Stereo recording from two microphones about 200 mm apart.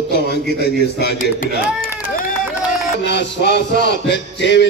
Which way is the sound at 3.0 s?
60° left (ahead or behind).